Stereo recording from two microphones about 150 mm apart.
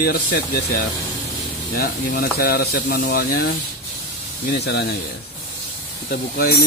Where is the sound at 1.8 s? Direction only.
75° left (ahead or behind); by 3.4 s 90° left.